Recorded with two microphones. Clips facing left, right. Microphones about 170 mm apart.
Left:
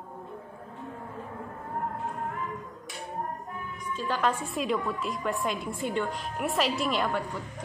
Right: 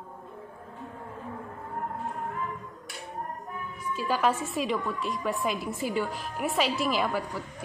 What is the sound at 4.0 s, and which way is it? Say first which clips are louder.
A woman's voice: right 2 dB; 10° right (ahead or behind).